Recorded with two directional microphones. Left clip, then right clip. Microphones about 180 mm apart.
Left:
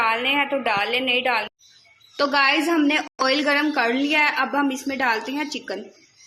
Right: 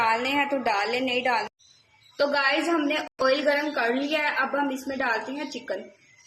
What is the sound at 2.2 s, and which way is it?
A woman's voice, 45° left (ahead or behind).